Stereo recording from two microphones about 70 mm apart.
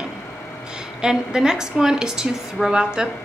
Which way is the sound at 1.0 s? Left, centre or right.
Centre.